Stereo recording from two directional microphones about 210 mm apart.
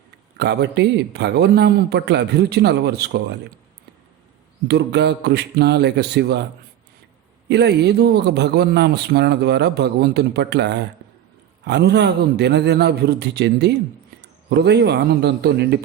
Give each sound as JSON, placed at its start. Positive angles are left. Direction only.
{"t": 0.3, "sound": "a man's voice", "side_deg": -55}
{"t": 4.7, "sound": "a man's voice", "side_deg": -55}
{"t": 7.4, "sound": "a man's voice", "side_deg": -55}